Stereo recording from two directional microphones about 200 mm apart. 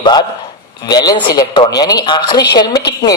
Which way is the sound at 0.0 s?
20° left (ahead or behind).